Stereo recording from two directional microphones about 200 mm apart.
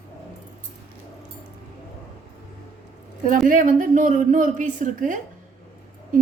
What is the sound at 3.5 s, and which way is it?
Speech, 40° right (ahead or behind).